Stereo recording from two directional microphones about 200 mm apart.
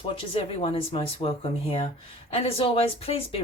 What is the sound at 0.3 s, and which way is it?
Speech, 30° left (ahead or behind).